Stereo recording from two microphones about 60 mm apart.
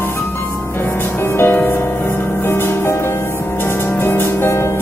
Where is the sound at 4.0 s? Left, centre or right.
Left.